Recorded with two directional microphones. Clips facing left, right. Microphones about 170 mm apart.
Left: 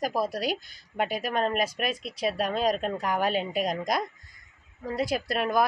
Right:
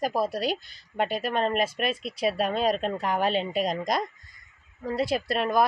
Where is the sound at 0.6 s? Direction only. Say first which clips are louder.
Left 3 dB; 50° left (ahead or behind).